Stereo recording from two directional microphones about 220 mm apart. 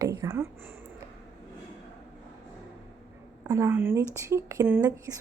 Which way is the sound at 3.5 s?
10° right (ahead or behind).